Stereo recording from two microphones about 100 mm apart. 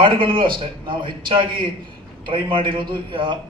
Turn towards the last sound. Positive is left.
turn(degrees=-55)  # may be behind; listen again after turning